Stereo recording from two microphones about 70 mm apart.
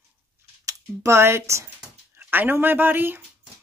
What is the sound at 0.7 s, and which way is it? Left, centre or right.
Speech, right.